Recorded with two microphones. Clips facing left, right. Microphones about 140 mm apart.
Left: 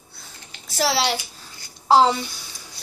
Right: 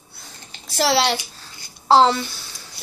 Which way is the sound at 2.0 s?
15° left (ahead or behind).